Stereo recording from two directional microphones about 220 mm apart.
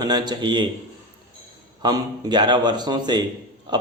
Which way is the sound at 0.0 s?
20° right (ahead or behind).